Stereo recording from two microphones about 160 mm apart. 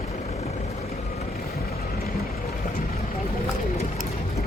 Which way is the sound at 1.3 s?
70° left (ahead or behind).